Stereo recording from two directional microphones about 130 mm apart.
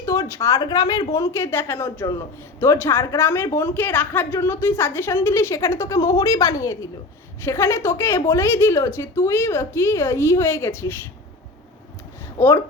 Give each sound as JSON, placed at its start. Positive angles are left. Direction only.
{"t": 0.0, "sound": "a woman's voice", "side_deg": 25}
{"t": 12.4, "sound": "a woman's voice", "side_deg": 20}